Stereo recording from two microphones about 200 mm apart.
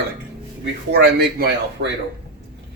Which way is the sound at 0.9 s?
55° right (ahead or behind).